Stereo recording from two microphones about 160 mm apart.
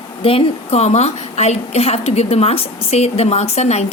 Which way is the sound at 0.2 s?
35° left (ahead or behind).